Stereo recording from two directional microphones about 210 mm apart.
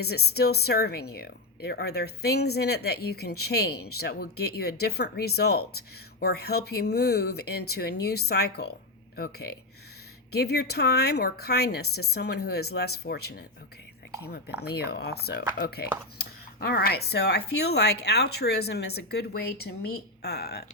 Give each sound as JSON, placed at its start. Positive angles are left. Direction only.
{"t": 0.0, "sound": "speech", "side_deg": 50}